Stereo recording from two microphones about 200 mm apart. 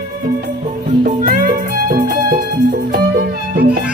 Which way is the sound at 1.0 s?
45° right (ahead or behind).